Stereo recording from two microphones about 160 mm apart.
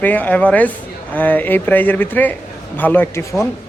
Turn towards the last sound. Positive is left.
turn(degrees=10)  # may be behind; listen again after turning